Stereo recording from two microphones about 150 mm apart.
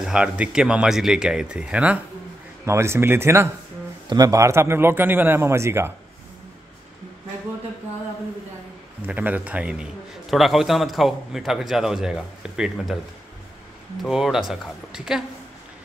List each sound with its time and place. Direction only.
0.0 s a man's voice: 5° right (ahead or behind)
2.6 s a man's voice: 20° right (ahead or behind)
9.0 s a man's voice: 10° right (ahead or behind)
14.0 s a man's voice: centre (ahead or behind)